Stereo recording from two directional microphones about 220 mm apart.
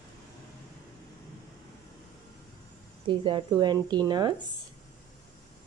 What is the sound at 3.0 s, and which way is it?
A woman's voice, 20° right (ahead or behind).